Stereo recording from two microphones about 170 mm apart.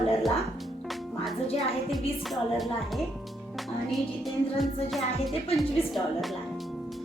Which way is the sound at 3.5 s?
Centre (ahead or behind).